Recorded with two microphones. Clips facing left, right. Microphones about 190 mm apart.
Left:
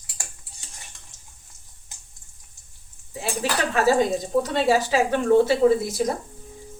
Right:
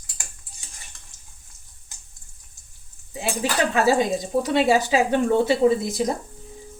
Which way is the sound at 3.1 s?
15° right (ahead or behind).